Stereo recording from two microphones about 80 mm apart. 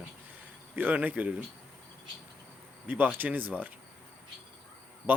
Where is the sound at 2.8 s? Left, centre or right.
Right.